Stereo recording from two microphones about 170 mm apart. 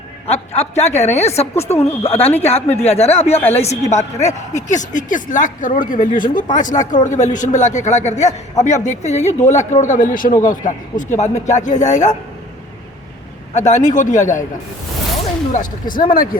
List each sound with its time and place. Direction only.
0.3 s a woman's voice: 40° left (ahead or behind)
13.5 s speech: 45° left (ahead or behind)
15.5 s speech: 55° left (ahead or behind)